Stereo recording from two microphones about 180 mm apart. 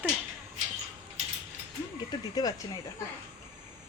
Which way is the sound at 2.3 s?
20° left (ahead or behind).